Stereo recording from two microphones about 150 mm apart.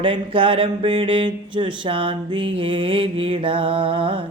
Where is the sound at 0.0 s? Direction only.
35° right (ahead or behind).